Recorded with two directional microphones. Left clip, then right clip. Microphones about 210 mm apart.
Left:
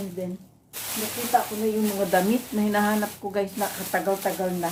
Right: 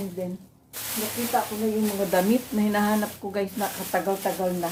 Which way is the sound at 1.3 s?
25° left (ahead or behind).